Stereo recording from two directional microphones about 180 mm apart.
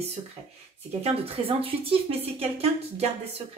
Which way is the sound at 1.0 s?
35° right (ahead or behind).